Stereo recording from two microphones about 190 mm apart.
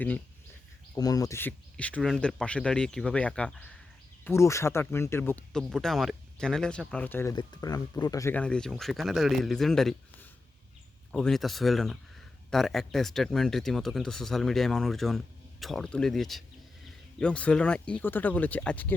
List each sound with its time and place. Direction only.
0.9 s speech: 20° left (ahead or behind); by 9.9 s centre (ahead or behind)
11.1 s speech: centre (ahead or behind)